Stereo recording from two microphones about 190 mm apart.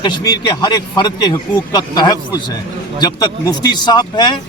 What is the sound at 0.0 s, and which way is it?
Speech, 20° left (ahead or behind).